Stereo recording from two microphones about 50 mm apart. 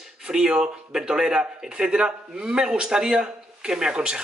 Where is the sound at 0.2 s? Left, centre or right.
Centre.